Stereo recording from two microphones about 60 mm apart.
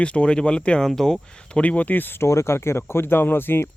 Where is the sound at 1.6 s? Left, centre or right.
Left.